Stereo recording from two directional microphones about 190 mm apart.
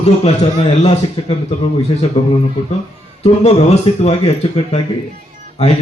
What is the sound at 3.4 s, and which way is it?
A man's voice, 35° left (ahead or behind).